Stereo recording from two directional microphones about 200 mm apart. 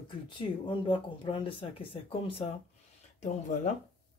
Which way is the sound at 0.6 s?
25° left (ahead or behind).